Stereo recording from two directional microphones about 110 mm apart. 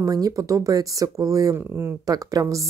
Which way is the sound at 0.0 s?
30° right (ahead or behind).